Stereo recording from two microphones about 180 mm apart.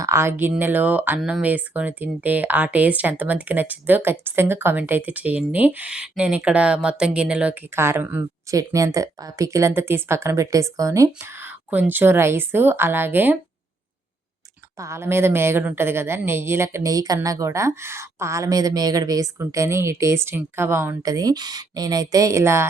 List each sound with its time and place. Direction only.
0.0 s speech: 15° right (ahead or behind)
14.8 s speech: 15° right (ahead or behind)